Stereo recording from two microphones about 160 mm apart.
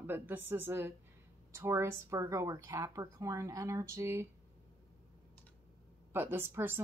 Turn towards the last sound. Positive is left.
turn(degrees=-15)  # may be behind; listen again after turning